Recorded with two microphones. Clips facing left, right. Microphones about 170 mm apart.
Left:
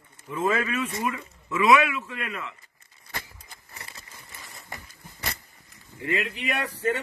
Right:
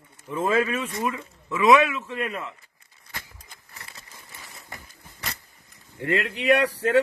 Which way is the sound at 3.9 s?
Centre (ahead or behind).